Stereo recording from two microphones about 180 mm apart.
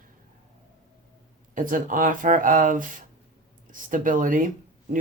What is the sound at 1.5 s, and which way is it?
Speech, 50° right (ahead or behind).